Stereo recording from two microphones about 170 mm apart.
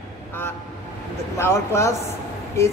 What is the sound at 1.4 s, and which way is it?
Speech, 15° left (ahead or behind).